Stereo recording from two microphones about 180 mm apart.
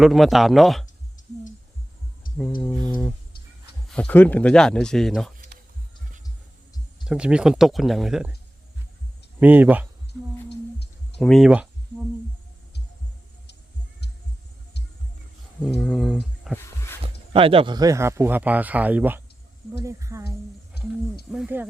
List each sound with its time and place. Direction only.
0.0 s speech: centre (ahead or behind)
2.3 s a sound: 50° left (ahead or behind)
2.6 s mantra: 10° left (ahead or behind)
3.8 s speech: 5° left (ahead or behind)
7.0 s speech: 5° right (ahead or behind)
9.4 s speech: 10° right (ahead or behind)
10.1 s a sound: 70° left (ahead or behind)
11.2 s speech: centre (ahead or behind)
15.6 s speech: 5° left (ahead or behind)
17.0 s speech: 30° right (ahead or behind)
20.8 s a sound: 60° left (ahead or behind)
21.3 s speech: 10° right (ahead or behind)